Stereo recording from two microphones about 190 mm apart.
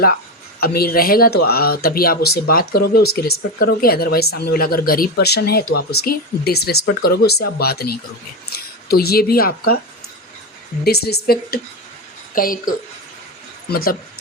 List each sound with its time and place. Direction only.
0.6 s speech: 55° left (ahead or behind)
10.8 s speech: 55° left (ahead or behind)